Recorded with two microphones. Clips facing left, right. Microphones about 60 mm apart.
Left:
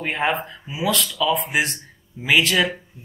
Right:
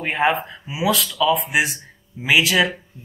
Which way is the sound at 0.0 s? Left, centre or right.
Centre.